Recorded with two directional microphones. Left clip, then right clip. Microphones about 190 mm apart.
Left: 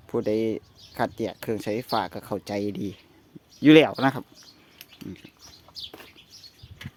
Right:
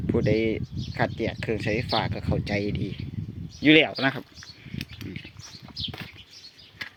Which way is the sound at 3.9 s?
15° left (ahead or behind).